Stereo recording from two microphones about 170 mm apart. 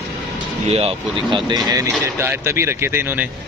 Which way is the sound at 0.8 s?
30° right (ahead or behind).